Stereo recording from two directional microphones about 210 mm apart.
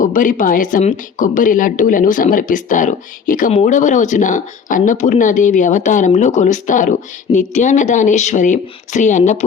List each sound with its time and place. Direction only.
0.0 s speech: 40° left (ahead or behind)